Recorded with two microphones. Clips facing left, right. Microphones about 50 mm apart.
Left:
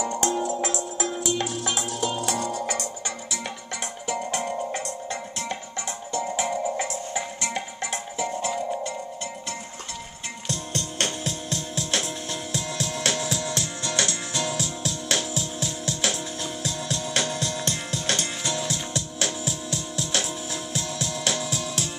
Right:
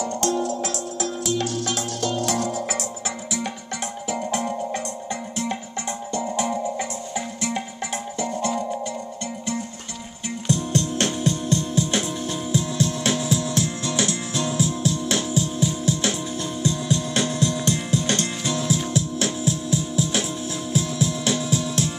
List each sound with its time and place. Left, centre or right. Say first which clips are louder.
0.0 s music: right 2 dB; centre
4.1 s music: right 2 dB; centre
6.2 s music: right 2 dB; centre
10.5 s music: right 9 dB; centre